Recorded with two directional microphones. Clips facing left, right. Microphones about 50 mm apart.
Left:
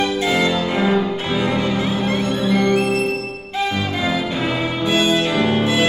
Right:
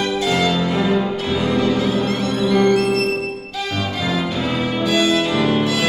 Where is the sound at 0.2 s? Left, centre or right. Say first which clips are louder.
Even; left.